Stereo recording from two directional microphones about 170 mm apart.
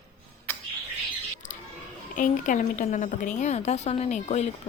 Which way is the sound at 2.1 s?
50° left (ahead or behind).